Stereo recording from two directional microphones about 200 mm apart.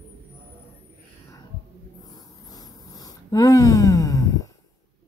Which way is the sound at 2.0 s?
20° left (ahead or behind).